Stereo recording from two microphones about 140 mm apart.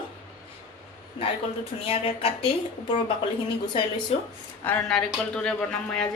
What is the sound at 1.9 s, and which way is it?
Speech, 40° left (ahead or behind).